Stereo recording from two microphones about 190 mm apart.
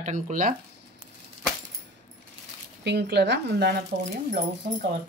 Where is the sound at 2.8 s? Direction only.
65° right (ahead or behind).